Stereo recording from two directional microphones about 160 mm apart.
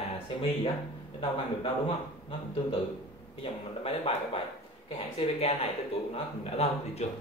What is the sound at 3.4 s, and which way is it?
A man's voice, 35° left (ahead or behind).